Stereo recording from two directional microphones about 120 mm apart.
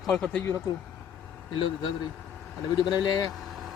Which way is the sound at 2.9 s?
35° left (ahead or behind).